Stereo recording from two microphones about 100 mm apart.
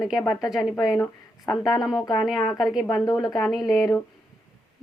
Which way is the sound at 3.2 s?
40° left (ahead or behind).